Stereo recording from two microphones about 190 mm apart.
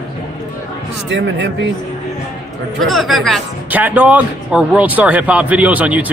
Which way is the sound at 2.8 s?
Centre (ahead or behind).